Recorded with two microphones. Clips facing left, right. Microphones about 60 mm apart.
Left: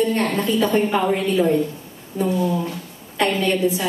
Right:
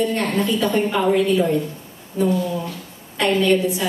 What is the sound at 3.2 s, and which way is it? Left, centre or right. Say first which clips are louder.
Speech: right 2 dB; left.